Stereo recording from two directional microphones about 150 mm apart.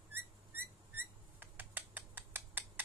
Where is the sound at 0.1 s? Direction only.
15° right (ahead or behind).